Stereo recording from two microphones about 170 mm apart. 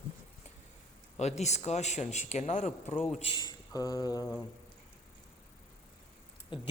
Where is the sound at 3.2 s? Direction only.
30° left (ahead or behind).